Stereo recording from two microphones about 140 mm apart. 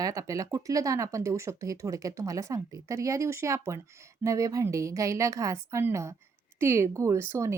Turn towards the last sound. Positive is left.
turn(degrees=-20)  # may be behind; listen again after turning